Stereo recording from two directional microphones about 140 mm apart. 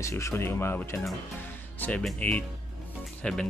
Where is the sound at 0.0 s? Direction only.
20° left (ahead or behind).